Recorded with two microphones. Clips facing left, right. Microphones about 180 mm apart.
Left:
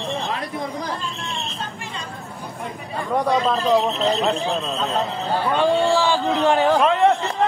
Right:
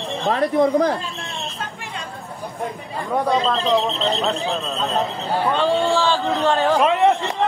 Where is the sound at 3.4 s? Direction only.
10° left (ahead or behind).